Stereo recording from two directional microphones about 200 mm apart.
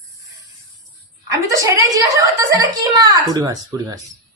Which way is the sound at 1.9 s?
15° right (ahead or behind).